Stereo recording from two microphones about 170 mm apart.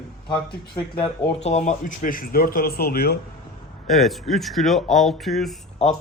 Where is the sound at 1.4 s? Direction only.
40° left (ahead or behind); by 3.1 s 65° left (ahead or behind).